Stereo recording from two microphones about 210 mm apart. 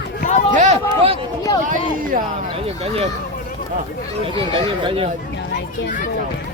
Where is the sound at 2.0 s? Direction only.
40° right (ahead or behind).